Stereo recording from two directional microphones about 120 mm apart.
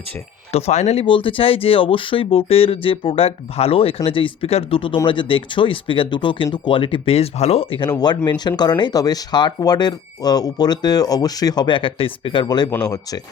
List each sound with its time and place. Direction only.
0.5 s speech: 65° left (ahead or behind)
1.0 s speech: 45° left (ahead or behind)
7.9 s speech: 35° left (ahead or behind)